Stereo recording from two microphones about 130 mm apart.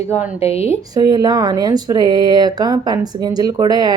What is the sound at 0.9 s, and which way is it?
Speech, 30° right (ahead or behind).